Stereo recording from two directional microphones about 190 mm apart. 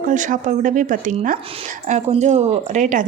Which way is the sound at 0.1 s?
40° right (ahead or behind).